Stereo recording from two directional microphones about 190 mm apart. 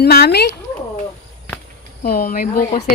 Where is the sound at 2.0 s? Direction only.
50° left (ahead or behind).